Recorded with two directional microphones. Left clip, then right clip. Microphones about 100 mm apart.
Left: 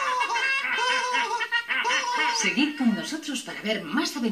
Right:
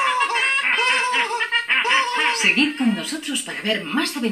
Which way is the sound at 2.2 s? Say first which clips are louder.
Right 5 dB; 15° left (ahead or behind).